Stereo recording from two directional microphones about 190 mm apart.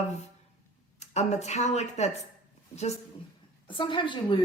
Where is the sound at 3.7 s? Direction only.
25° left (ahead or behind).